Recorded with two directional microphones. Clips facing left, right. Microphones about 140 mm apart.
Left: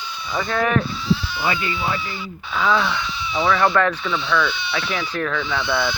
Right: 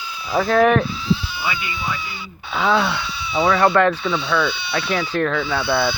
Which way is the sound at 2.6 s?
35° right (ahead or behind).